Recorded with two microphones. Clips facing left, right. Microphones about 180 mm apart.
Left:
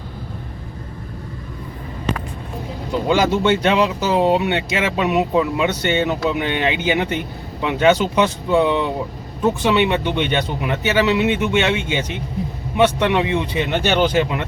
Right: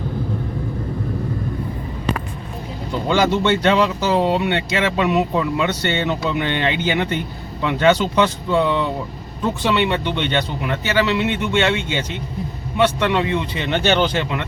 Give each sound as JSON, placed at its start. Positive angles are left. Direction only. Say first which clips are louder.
{"t": 3.1, "sound": "speech", "louder": "even", "side_deg": 10}
{"t": 13.7, "sound": "speech", "louder": "right 2 dB", "side_deg": 5}